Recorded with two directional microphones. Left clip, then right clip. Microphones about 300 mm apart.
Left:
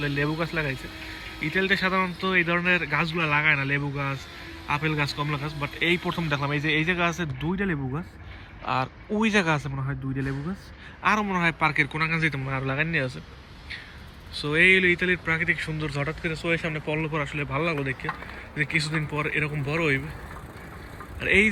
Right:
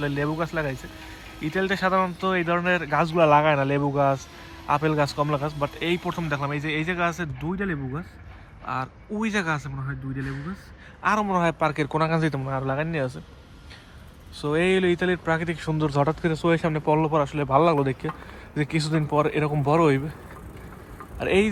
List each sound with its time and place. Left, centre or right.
0.2 s speech: centre
0.7 s a sound: right
1.5 s speech: centre
14.4 s speech: centre
21.2 s speech: centre